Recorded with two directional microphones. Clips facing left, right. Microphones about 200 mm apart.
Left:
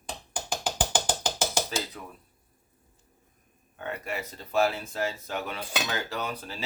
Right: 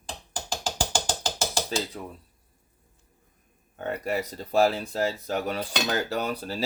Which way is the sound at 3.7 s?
40° right (ahead or behind).